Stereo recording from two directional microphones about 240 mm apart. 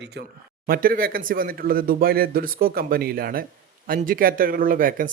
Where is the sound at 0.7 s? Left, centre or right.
Right.